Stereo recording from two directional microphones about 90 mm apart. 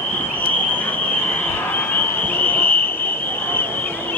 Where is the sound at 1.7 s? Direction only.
20° left (ahead or behind).